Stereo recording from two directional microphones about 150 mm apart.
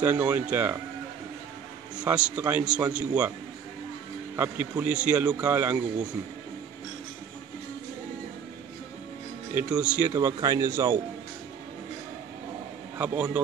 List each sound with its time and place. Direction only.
0.0 s a man's voice: 10° right (ahead or behind)
2.0 s a man's voice: 10° right (ahead or behind)
4.4 s a man's voice: 10° right (ahead or behind)
9.5 s a man's voice: 10° right (ahead or behind)
10.1 s speech: 20° right (ahead or behind)
12.9 s a man's voice: 15° right (ahead or behind)